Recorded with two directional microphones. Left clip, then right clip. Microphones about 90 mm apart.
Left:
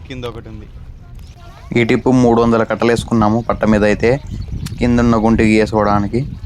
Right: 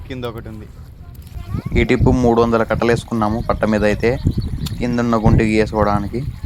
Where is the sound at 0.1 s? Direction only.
20° right (ahead or behind).